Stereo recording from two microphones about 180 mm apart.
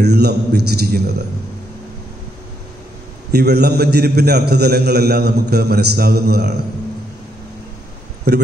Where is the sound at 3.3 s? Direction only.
65° right (ahead or behind).